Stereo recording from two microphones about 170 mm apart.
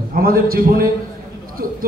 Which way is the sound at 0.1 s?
60° right (ahead or behind).